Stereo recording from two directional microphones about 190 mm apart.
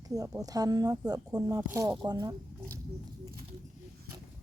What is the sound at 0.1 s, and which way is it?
Speech, 20° right (ahead or behind).